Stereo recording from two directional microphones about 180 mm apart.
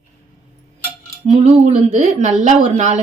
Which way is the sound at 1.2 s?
40° right (ahead or behind).